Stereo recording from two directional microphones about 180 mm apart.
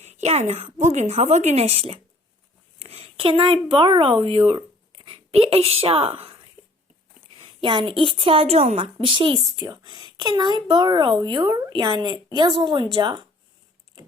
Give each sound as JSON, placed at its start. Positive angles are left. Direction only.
{"t": 0.0, "sound": "a woman's voice", "side_deg": -40}
{"t": 7.3, "sound": "speech", "side_deg": -25}